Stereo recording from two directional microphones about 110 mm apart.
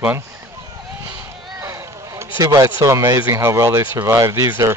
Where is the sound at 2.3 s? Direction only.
35° right (ahead or behind).